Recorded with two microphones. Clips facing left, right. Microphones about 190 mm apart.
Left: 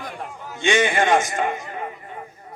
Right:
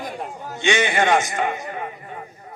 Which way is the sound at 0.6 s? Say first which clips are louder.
Left 1 dB; 50° left (ahead or behind).